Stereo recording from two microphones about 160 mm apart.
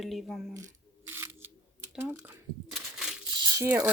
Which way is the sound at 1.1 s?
15° right (ahead or behind).